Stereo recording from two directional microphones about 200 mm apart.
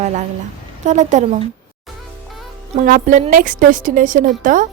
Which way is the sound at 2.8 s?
40° right (ahead or behind).